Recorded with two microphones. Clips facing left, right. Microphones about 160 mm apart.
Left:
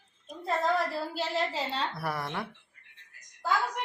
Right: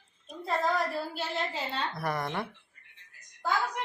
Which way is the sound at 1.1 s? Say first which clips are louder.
Left 3 dB; 35° left (ahead or behind).